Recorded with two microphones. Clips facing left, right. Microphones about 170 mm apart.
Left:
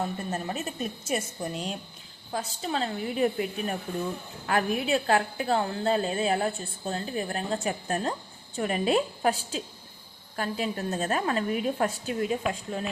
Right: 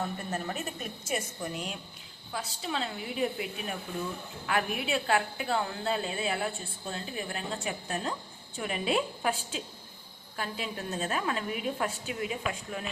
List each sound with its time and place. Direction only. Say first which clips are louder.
0.3 s a woman's voice: left 3 dB; 25° left (ahead or behind)